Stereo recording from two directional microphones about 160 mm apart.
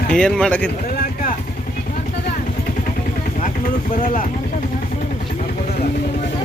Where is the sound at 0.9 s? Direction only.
65° left (ahead or behind).